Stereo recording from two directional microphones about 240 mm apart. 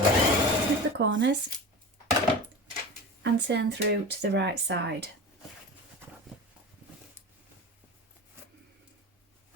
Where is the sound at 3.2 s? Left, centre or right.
Right.